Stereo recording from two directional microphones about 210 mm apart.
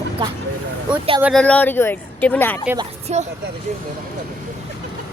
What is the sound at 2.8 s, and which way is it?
Speech, 30° right (ahead or behind).